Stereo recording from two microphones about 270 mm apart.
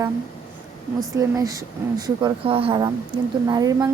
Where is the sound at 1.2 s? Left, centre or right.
Centre.